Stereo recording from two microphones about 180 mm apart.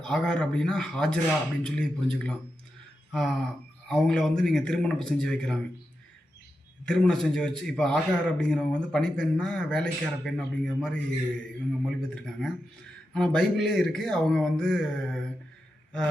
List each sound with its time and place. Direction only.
0.0 s a man's voice: 5° left (ahead or behind)
6.8 s a man's voice: 5° left (ahead or behind)